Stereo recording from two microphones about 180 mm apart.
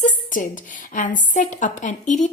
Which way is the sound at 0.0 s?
45° left (ahead or behind).